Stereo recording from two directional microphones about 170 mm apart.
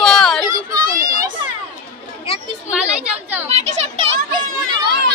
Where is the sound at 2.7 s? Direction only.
10° right (ahead or behind).